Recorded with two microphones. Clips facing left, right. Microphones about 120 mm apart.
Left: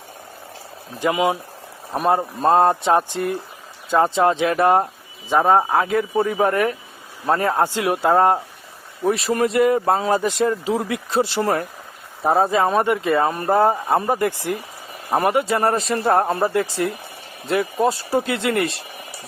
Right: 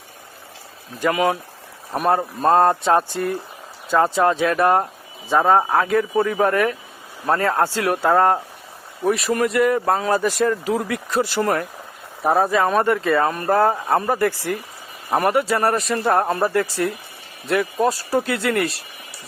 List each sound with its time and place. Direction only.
0.9 s speech: 15° left (ahead or behind)
2.6 s speech: 15° left (ahead or behind)